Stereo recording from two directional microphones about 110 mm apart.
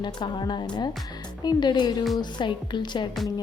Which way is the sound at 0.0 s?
45° left (ahead or behind).